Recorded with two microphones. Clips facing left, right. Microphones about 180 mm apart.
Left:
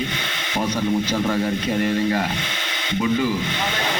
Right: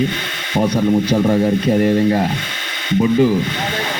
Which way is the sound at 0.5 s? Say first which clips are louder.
Right 7 dB; 35° right (ahead or behind).